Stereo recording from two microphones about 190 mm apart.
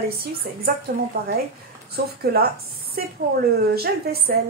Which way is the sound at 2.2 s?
55° right (ahead or behind).